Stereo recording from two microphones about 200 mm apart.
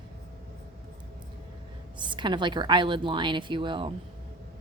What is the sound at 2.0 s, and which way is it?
A woman's voice, 25° right (ahead or behind).